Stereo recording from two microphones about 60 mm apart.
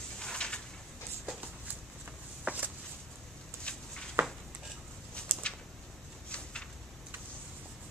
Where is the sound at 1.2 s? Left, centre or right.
Right.